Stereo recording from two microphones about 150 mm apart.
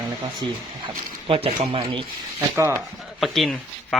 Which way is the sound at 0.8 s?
40° right (ahead or behind).